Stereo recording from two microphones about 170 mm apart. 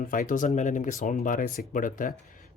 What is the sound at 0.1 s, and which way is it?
Speech, 50° left (ahead or behind).